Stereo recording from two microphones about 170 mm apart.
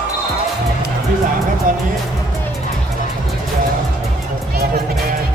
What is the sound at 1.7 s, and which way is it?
Music, 50° right (ahead or behind).